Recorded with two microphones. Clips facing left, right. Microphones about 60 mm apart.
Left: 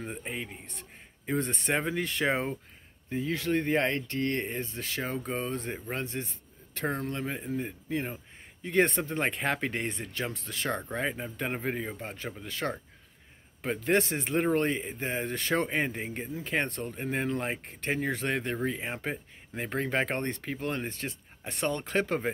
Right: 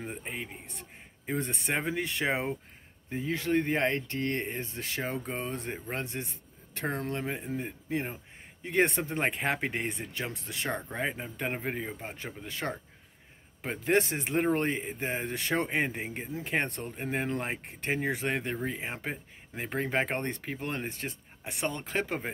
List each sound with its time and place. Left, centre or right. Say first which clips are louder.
0.0 s speech: left 1 dB; centre
3.1 s speech: even; right
6.1 s speech: left 1 dB; centre
6.7 s speech: left 1 dB; right
7.2 s speech: left 1 dB; centre
7.9 s speech: even; right
8.6 s speech: left 1 dB; centre
12.0 s speech: left 2 dB; centre
16.3 s speech: even; right
16.9 s speech: left 1 dB; centre